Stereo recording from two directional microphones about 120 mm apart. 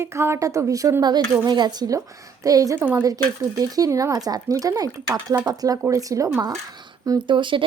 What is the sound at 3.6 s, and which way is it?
A woman's voice, 30° right (ahead or behind).